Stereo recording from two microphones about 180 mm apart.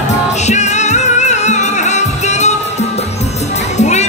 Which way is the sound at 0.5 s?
40° left (ahead or behind).